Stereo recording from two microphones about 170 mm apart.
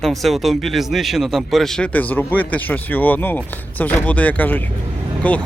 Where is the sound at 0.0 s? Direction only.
Centre (ahead or behind).